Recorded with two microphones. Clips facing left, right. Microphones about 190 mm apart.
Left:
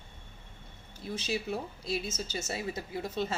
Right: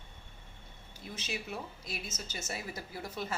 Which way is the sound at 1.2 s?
30° left (ahead or behind).